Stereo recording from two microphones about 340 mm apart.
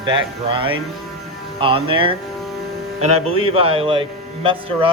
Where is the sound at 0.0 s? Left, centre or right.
Centre.